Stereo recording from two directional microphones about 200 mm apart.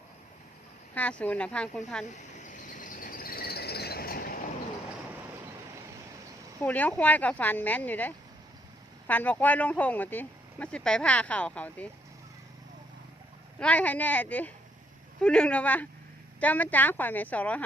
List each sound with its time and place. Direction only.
0.9 s speech: 10° left (ahead or behind)
2.1 s cricket: 35° left (ahead or behind)
6.6 s speech: 10° left (ahead or behind)
13.6 s speech: 5° left (ahead or behind)